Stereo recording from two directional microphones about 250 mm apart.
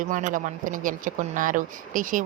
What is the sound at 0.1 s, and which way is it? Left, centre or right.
Speech, right.